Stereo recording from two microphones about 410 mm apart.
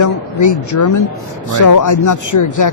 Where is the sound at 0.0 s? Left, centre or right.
Left.